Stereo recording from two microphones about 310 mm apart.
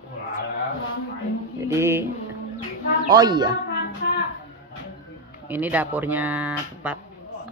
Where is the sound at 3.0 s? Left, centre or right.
Centre.